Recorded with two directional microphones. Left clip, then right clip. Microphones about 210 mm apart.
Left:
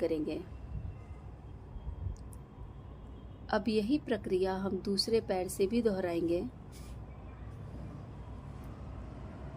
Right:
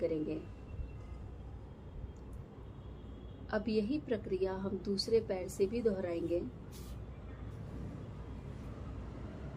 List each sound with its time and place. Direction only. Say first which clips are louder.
0.0 s a woman's voice: left 2 dB; 50° left (ahead or behind)
3.5 s a woman's voice: left 4 dB; 50° left (ahead or behind)